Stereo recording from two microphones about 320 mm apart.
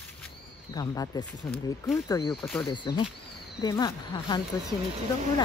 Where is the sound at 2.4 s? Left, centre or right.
Centre.